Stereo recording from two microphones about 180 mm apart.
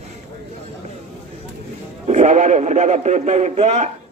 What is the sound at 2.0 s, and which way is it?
Speech, 40° right (ahead or behind).